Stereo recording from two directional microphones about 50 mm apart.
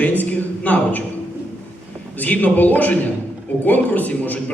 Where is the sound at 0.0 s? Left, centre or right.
Left.